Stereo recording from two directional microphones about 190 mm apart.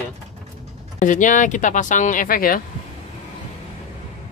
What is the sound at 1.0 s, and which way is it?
Speech, 40° left (ahead or behind).